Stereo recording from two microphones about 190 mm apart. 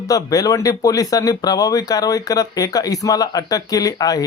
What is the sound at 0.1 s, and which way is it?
Speech, 20° left (ahead or behind).